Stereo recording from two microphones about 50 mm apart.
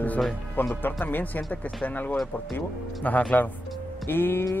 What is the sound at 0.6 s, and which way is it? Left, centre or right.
Speech, left.